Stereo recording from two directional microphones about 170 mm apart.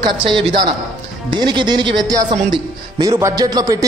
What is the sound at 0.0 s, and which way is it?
A man's voice, 30° right (ahead or behind).